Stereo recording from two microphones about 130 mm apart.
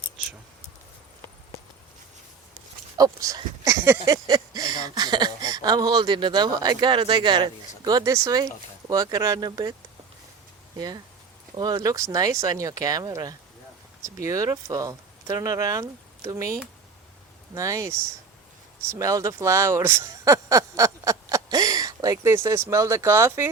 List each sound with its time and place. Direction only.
3.0 s speech: 25° right (ahead or behind)
10.8 s speech: 30° right (ahead or behind)